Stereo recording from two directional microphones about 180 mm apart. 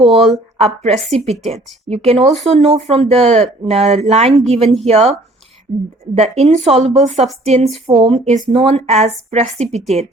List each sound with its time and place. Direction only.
0.0 s a woman's voice: 35° right (ahead or behind)
4.6 s speech: centre (ahead or behind)
4.9 s a woman's voice: 35° right (ahead or behind)
6.1 s a woman's voice: 35° right (ahead or behind)